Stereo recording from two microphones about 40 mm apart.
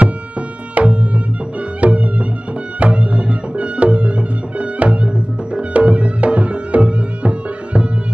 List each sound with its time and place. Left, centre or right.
0.7 s music: right